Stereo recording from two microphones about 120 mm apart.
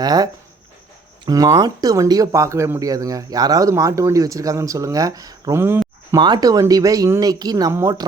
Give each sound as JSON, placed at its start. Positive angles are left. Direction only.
{"t": 0.0, "sound": "speech", "side_deg": -35}
{"t": 1.3, "sound": "speech", "side_deg": -30}
{"t": 6.1, "sound": "speech", "side_deg": -35}